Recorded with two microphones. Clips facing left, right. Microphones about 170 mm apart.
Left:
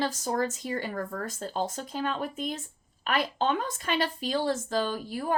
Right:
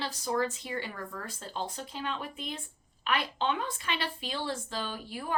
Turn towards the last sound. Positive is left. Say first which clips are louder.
# left 7 dB
turn(degrees=45)  # may be behind; listen again after turning